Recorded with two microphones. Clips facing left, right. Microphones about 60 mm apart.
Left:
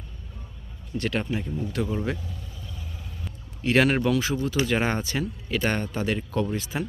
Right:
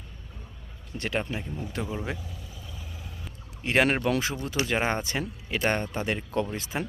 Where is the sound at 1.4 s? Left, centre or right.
Centre.